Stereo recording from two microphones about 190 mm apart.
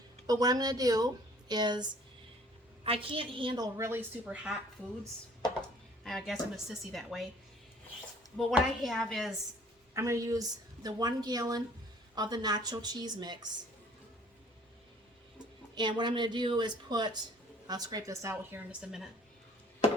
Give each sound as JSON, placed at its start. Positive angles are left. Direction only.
{"t": 0.3, "sound": "a woman's voice", "side_deg": -20}
{"t": 6.1, "sound": "speech", "side_deg": 0}
{"t": 8.4, "sound": "speech", "side_deg": 0}
{"t": 9.9, "sound": "a woman's voice", "side_deg": -15}
{"t": 15.7, "sound": "a woman's voice", "side_deg": -25}
{"t": 18.7, "sound": "speech", "side_deg": -5}